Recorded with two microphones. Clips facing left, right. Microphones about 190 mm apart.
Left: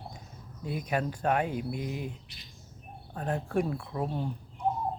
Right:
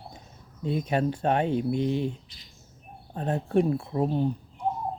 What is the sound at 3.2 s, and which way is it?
Speech, 25° right (ahead or behind).